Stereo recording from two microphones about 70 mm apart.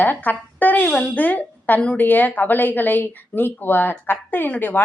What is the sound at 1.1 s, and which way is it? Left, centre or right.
A woman's voice, left.